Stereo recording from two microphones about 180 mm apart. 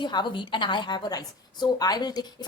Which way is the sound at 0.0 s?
25° left (ahead or behind).